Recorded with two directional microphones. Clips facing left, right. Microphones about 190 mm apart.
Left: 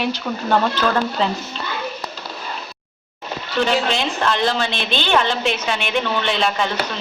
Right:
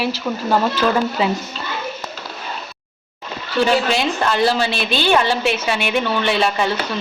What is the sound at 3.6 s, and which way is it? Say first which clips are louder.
A woman's voice: right 3 dB; 10° right (ahead or behind).